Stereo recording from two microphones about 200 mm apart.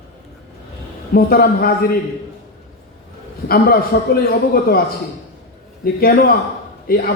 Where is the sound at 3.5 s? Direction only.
50° left (ahead or behind).